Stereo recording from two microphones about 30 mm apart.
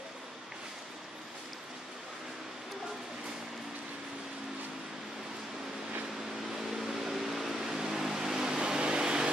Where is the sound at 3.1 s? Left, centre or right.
Centre.